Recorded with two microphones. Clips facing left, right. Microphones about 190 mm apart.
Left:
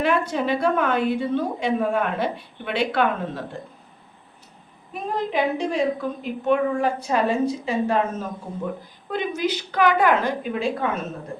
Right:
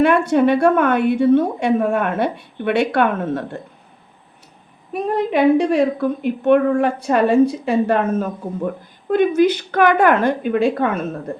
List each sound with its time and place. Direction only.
0.1 s a woman's voice: 60° right (ahead or behind)
5.3 s a woman's voice: 65° right (ahead or behind)